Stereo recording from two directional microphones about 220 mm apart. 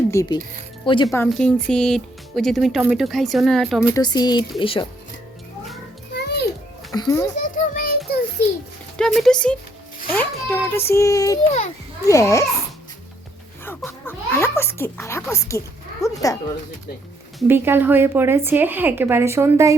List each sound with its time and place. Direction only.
0.1 s a child's voice: 15° left (ahead or behind)
1.3 s speech: 5° left (ahead or behind)
3.9 s speech: 20° left (ahead or behind)
6.1 s music: 50° left (ahead or behind)
6.9 s a child's voice: 15° left (ahead or behind)
7.5 s child singing: 40° left (ahead or behind)
9.0 s a child's voice: centre (ahead or behind)
13.7 s a sound: 10° left (ahead or behind)
17.5 s speech: 10° right (ahead or behind)